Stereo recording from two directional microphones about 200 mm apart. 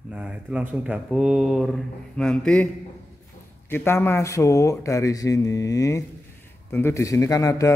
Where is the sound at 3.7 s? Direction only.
10° left (ahead or behind).